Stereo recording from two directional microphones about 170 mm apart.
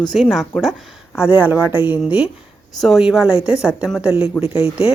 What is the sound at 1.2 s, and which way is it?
Speech, 10° right (ahead or behind).